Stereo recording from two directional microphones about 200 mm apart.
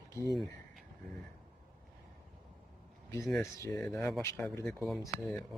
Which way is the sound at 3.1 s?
15° left (ahead or behind).